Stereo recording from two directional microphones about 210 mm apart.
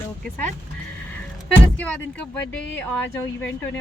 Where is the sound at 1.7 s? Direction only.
5° left (ahead or behind).